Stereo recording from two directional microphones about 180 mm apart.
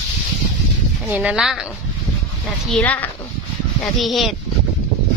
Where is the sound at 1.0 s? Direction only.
5° right (ahead or behind).